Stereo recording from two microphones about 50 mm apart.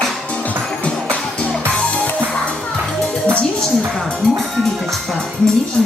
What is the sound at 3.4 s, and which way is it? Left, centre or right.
Music, centre.